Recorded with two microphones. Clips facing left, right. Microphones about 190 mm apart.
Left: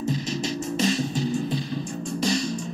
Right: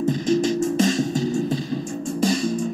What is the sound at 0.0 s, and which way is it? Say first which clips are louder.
Music: right 8 dB; 50° right (ahead or behind).